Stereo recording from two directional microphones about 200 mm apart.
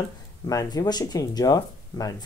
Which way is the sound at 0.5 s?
20° left (ahead or behind).